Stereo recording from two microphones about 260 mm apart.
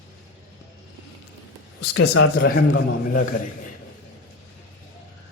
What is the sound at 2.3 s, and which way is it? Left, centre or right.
Speech, left.